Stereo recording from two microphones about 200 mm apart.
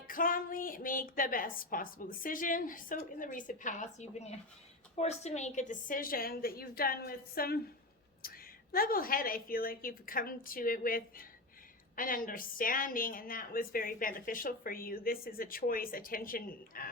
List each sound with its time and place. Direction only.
0.1 s a woman's voice: 45° left (ahead or behind)